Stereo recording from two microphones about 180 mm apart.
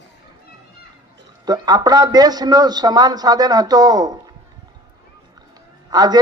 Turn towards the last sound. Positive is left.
turn(degrees=-20)  # may be behind; listen again after turning